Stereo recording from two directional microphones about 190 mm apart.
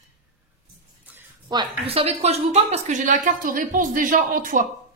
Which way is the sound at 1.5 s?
25° right (ahead or behind).